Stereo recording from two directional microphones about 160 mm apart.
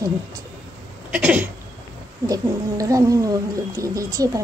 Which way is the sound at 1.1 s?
10° right (ahead or behind).